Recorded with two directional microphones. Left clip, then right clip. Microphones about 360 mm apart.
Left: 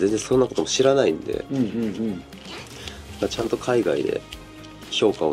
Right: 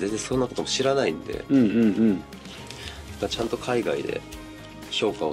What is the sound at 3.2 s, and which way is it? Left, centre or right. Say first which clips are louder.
Speech: left 3 dB; left.